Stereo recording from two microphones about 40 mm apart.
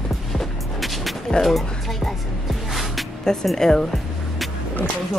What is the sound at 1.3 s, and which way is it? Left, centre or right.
Speech, centre.